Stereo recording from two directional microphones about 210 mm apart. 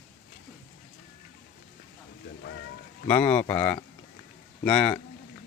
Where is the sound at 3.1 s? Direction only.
10° left (ahead or behind).